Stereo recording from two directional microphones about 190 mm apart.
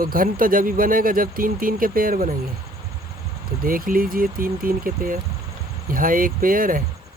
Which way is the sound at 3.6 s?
45° right (ahead or behind).